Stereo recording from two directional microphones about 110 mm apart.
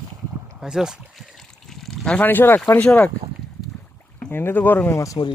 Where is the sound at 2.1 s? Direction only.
15° left (ahead or behind).